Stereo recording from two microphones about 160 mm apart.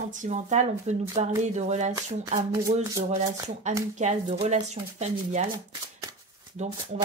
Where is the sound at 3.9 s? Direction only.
45° right (ahead or behind).